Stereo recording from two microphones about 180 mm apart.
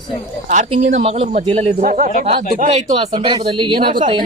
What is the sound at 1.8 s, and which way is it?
Speech, 45° right (ahead or behind).